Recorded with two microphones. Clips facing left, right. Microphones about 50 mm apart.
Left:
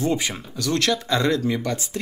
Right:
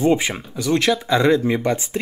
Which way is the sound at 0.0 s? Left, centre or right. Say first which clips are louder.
Right 6 dB; right.